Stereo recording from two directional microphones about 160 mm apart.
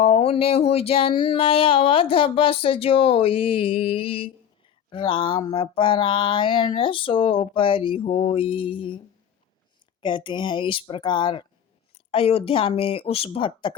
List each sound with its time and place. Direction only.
0.0 s speech: 40° left (ahead or behind)
10.0 s speech: 30° left (ahead or behind)